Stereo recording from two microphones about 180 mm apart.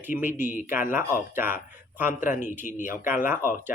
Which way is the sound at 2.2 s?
45° left (ahead or behind).